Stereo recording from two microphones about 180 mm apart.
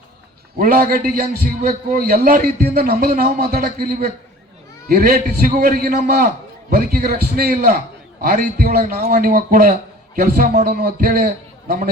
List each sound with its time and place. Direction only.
0.6 s a man's voice: 55° right (ahead or behind)